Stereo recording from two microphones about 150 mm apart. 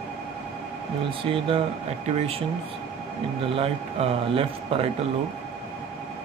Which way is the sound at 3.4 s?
40° right (ahead or behind).